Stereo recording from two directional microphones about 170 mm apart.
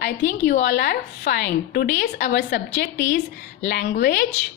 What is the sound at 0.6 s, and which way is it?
A woman's voice, 90° left.